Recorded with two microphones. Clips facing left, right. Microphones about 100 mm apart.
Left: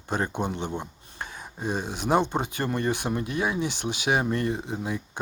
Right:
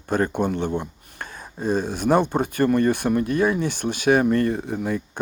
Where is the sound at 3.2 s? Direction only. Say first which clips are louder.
Right 8 dB; 50° right (ahead or behind).